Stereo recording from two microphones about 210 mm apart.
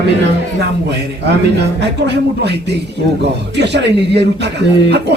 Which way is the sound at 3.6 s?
55° right (ahead or behind).